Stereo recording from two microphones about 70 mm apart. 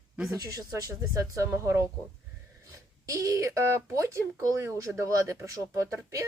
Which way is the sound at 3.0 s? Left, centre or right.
Right.